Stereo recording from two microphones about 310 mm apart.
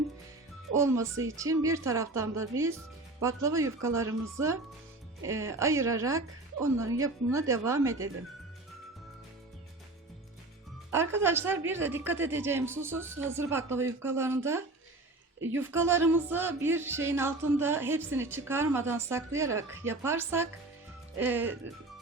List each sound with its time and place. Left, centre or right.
0.8 s speech: centre
1.1 s speech: right
1.4 s speech: centre
10.9 s speech: centre